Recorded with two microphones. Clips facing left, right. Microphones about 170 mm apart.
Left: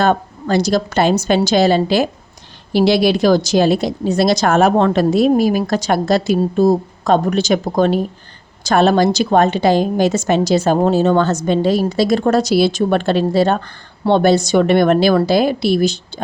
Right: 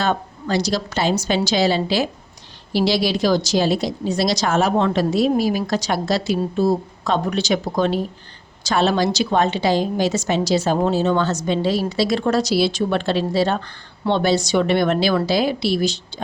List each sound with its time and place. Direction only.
0.0 s a woman's voice: 50° left (ahead or behind)